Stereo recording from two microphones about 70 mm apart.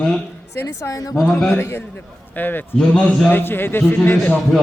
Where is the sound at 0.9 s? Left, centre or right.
Left.